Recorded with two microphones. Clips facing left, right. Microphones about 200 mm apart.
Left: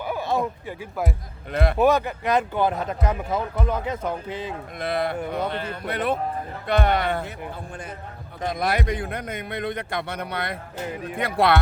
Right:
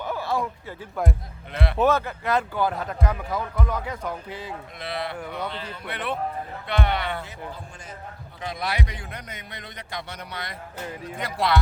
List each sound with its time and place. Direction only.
0.0 s a sound: 15° left (ahead or behind)
1.5 s speech: 45° left (ahead or behind)
1.8 s speech: 15° left (ahead or behind)
4.8 s speech: 50° left (ahead or behind)
8.4 s a man's voice: 50° left (ahead or behind)